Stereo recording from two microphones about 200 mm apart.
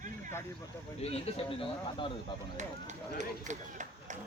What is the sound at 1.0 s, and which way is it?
Speech, 30° left (ahead or behind).